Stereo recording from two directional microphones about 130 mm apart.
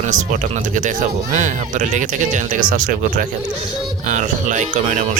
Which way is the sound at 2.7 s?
90° right.